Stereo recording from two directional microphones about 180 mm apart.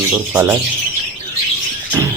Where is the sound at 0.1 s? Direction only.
15° right (ahead or behind).